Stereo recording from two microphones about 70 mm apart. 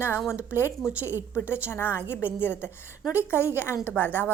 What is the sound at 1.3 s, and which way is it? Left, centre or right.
A woman's voice, left.